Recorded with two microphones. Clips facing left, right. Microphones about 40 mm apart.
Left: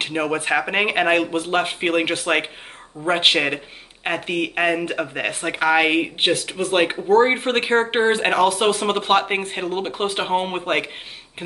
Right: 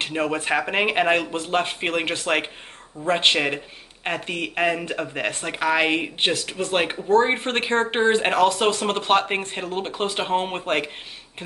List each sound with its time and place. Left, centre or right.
0.0 s speech: centre